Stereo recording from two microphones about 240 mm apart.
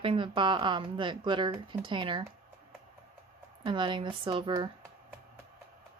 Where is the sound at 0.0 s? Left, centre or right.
Right.